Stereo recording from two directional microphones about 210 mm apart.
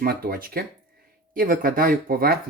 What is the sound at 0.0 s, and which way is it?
Speech, 45° right (ahead or behind).